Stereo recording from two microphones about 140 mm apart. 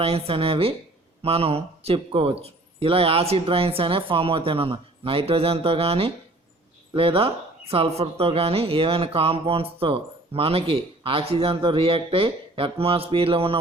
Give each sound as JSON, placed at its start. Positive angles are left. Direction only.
{"t": 0.0, "sound": "speech", "side_deg": -45}